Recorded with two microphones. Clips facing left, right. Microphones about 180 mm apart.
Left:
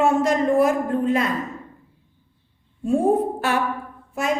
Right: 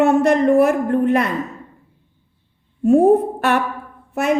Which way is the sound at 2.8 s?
65° right (ahead or behind).